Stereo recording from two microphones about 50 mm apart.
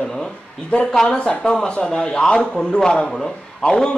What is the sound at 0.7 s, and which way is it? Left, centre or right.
A man's voice, centre.